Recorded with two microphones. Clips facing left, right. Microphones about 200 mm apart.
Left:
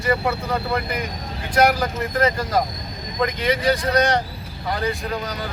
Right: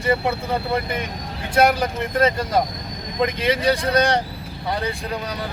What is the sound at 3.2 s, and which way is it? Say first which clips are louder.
Speech: right 1 dB; 25° right (ahead or behind).